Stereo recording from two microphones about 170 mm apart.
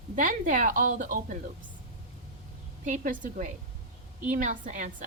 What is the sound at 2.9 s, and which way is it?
A woman's voice, 50° right (ahead or behind).